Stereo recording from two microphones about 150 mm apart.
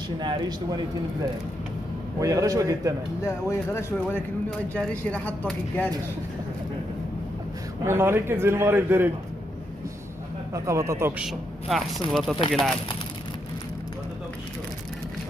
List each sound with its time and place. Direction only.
0.2 s a man's voice: 30° right (ahead or behind)
2.1 s a man's voice: 20° right (ahead or behind)
3.3 s speech: 15° left (ahead or behind)
7.8 s a man's voice: 15° right (ahead or behind)
10.5 s a man's voice: 20° right (ahead or behind)
11.2 s speech: centre (ahead or behind)